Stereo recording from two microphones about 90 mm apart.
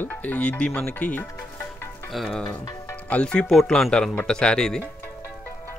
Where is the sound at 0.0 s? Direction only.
20° left (ahead or behind).